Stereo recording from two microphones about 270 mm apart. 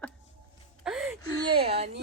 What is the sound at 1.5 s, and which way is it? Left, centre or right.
Speech, right.